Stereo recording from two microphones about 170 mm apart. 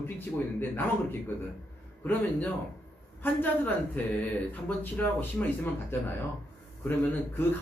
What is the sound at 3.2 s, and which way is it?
A man's voice, 10° left (ahead or behind).